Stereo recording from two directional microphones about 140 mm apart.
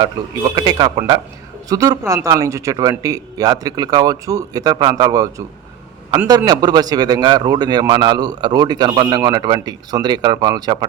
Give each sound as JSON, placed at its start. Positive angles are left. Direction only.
{"t": 0.5, "sound": "speech", "side_deg": -30}